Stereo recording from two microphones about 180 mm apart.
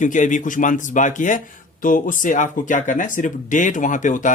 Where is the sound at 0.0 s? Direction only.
45° left (ahead or behind).